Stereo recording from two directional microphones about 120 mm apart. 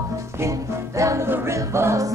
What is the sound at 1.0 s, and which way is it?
A capella, 25° right (ahead or behind).